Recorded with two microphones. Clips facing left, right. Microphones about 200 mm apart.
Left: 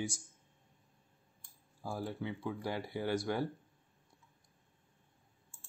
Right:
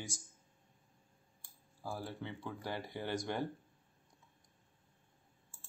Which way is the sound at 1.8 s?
15° left (ahead or behind).